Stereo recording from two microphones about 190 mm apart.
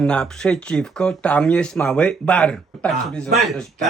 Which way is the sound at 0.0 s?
5° left (ahead or behind).